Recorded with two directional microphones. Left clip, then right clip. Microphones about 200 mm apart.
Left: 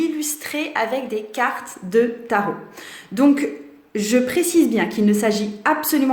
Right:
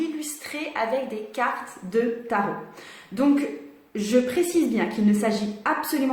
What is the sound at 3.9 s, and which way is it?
A woman's voice, 45° left (ahead or behind).